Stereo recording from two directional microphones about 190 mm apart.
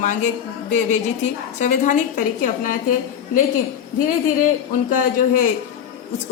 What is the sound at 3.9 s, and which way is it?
Speech, 45° left (ahead or behind).